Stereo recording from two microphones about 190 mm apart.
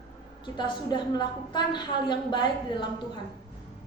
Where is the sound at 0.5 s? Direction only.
25° left (ahead or behind).